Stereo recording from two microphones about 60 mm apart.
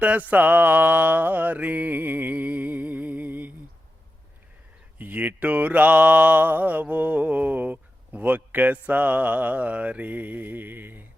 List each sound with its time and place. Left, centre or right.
0.0 s mantra: right
4.9 s mantra: right